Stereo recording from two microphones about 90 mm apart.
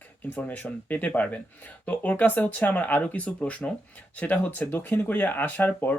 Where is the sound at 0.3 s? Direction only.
20° left (ahead or behind).